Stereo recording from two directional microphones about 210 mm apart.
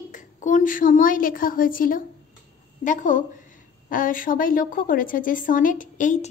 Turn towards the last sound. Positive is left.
turn(degrees=35)  # may be behind; listen again after turning